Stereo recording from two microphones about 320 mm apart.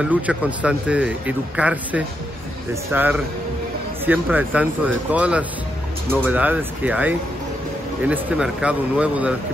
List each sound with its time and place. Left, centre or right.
0.0 s a man's voice: centre